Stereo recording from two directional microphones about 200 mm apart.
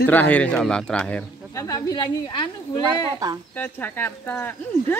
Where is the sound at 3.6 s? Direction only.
10° left (ahead or behind).